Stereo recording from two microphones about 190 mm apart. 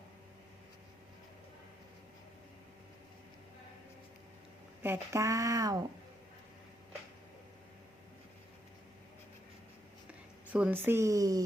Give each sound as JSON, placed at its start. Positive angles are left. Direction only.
{"t": 4.8, "sound": "speech", "side_deg": -15}
{"t": 10.1, "sound": "speech", "side_deg": -5}